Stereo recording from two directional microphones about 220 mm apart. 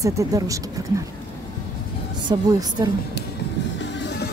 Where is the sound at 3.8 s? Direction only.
50° left (ahead or behind).